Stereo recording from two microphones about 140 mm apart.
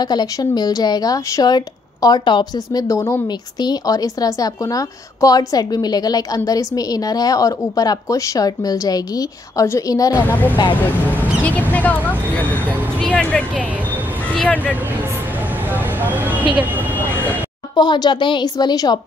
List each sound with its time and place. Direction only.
0.0 s a woman's voice: 30° left (ahead or behind)
10.2 s speech: 10° left (ahead or behind)
15.7 s vehicle: 15° right (ahead or behind)
16.5 s speech: 15° right (ahead or behind)
17.7 s a woman's voice: 30° left (ahead or behind)